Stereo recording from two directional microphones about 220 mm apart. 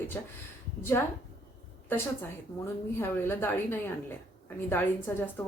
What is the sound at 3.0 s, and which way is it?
Speech, 10° left (ahead or behind).